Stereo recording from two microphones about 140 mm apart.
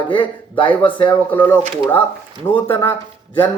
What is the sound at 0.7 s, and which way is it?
Speech, 10° left (ahead or behind).